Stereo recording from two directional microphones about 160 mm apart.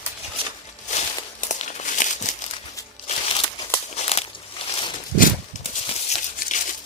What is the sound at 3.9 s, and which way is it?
Walk, 40° left (ahead or behind).